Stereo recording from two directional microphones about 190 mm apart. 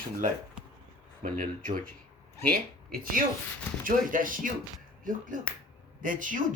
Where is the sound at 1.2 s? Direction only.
50° right (ahead or behind).